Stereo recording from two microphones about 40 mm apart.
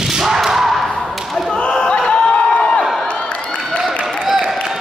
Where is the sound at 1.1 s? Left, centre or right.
Centre.